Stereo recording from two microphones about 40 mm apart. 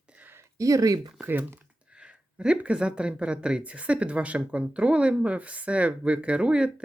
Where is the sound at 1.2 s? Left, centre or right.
Right.